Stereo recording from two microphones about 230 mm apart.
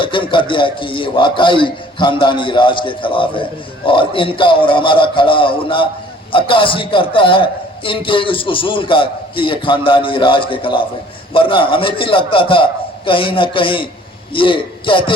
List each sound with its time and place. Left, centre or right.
0.0 s a man's voice: left